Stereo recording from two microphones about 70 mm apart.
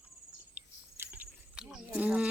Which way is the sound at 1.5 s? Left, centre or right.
Centre.